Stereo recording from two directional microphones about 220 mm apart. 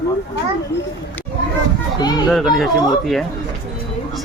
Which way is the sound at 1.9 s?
20° left (ahead or behind).